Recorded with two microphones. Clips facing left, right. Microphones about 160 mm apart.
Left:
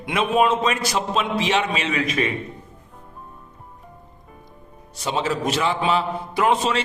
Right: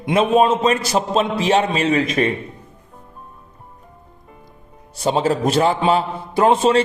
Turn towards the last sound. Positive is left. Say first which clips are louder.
# right 6 dB
turn(degrees=-35)  # may be behind; listen again after turning